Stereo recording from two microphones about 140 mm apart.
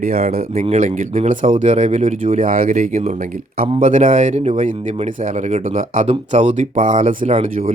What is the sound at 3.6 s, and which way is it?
Speech, 70° right (ahead or behind).